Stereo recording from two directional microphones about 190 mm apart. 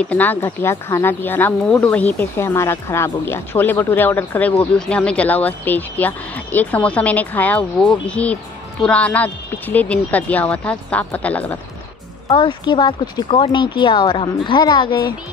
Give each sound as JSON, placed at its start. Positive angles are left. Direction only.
{"t": 0.0, "sound": "speech", "side_deg": 10}
{"t": 12.3, "sound": "a woman's voice", "side_deg": 25}